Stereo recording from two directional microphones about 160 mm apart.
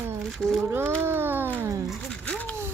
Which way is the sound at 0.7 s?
15° right (ahead or behind).